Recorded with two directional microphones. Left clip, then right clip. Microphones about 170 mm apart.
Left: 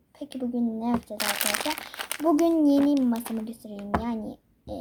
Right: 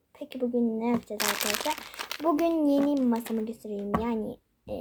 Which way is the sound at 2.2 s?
20° right (ahead or behind).